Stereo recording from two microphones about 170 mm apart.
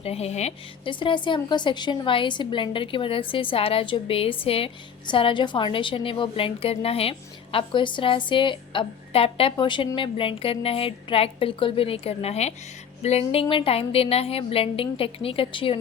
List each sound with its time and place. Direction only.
0.0 s a woman's voice: 35° left (ahead or behind)
0.9 s a woman's voice: 30° left (ahead or behind)